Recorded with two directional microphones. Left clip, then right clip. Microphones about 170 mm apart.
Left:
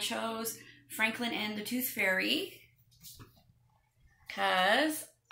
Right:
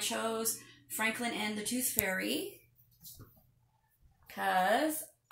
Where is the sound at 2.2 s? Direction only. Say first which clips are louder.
Left 4 dB; 45° right (ahead or behind).